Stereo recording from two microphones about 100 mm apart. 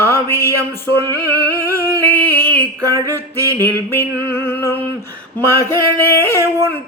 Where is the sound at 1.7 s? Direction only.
25° left (ahead or behind).